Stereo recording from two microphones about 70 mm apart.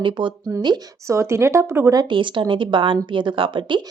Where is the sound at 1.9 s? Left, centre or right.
Right.